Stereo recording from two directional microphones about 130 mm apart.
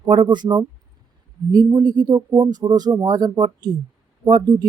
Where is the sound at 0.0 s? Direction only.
40° right (ahead or behind).